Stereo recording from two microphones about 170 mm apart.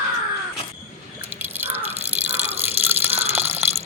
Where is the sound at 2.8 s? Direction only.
10° right (ahead or behind).